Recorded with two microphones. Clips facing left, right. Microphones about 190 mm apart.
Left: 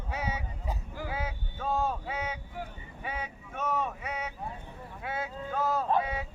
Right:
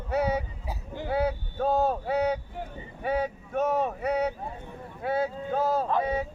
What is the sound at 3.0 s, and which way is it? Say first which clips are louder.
Vehicle: right 11 dB; 40° right (ahead or behind).